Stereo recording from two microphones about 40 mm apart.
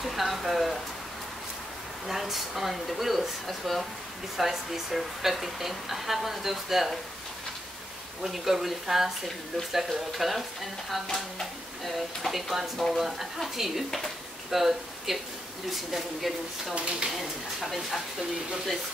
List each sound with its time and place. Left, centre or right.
0.0 s a sound: centre
2.0 s a woman's voice: centre
8.2 s a woman's voice: centre
16.7 s speech: right
17.2 s a woman's voice: centre